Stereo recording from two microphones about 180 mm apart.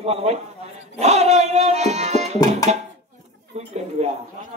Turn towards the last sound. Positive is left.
turn(degrees=-35)  # may be behind; listen again after turning